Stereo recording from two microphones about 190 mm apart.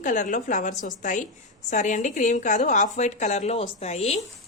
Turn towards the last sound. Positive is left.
turn(degrees=35)  # may be behind; listen again after turning